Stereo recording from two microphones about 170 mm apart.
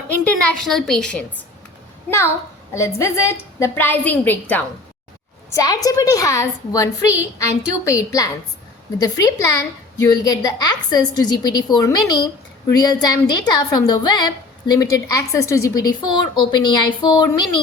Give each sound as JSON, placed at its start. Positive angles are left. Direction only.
{"t": 0.3, "sound": "a woman's voice", "side_deg": 5}
{"t": 2.0, "sound": "a woman's voice", "side_deg": 15}